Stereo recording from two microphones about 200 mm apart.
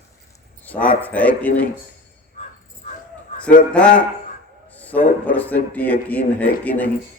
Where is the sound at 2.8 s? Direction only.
40° left (ahead or behind).